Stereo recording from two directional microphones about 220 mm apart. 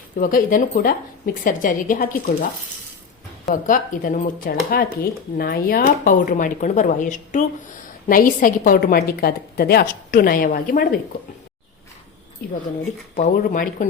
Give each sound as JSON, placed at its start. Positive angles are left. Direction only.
{"t": 0.2, "sound": "a woman's voice", "side_deg": 40}
{"t": 13.1, "sound": "a woman's voice", "side_deg": 35}